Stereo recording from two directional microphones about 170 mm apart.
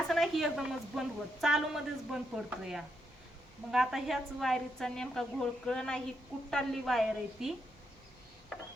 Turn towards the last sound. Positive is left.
turn(degrees=0)  # may be behind; listen again after turning